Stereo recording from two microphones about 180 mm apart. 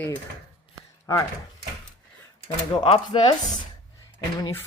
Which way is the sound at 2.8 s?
30° left (ahead or behind).